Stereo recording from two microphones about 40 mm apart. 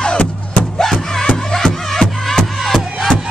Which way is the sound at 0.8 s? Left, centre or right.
Centre.